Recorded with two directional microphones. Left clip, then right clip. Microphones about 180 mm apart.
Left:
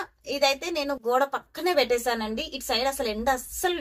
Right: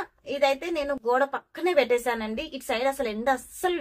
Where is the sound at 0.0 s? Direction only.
15° right (ahead or behind).